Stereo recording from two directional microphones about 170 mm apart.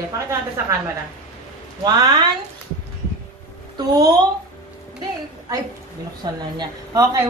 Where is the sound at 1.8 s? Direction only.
20° right (ahead or behind).